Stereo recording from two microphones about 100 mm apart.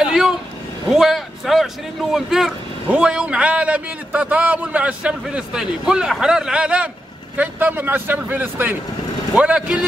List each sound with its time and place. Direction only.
0.0 s vehicle: 5° right (ahead or behind)
0.8 s speech: 5° right (ahead or behind)